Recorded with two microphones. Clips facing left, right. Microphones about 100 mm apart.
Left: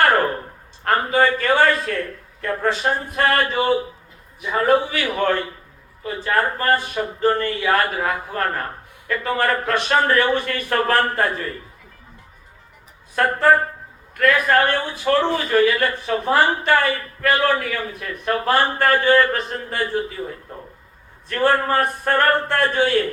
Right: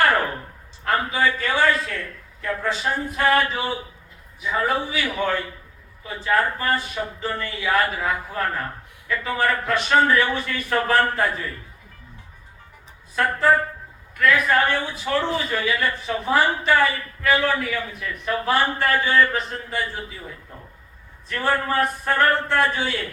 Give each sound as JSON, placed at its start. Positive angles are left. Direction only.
{"t": 0.9, "sound": "a man's voice", "side_deg": 50}
{"t": 2.4, "sound": "a sound", "side_deg": 50}
{"t": 6.0, "sound": "a man's voice", "side_deg": 50}
{"t": 13.1, "sound": "a man's voice", "side_deg": 50}